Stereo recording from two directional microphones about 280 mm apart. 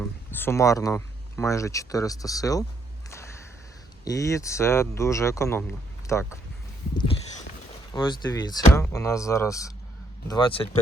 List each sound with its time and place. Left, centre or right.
0.3 s speech: centre
4.0 s speech: centre
7.9 s speech: centre